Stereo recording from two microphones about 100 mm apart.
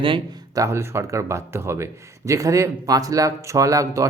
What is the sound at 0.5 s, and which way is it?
A man's voice, 30° right (ahead or behind).